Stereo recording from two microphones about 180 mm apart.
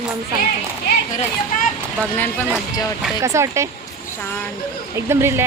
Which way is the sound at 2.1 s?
10° left (ahead or behind).